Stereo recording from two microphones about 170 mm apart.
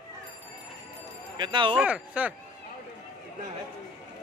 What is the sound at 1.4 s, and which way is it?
Speech, 30° right (ahead or behind).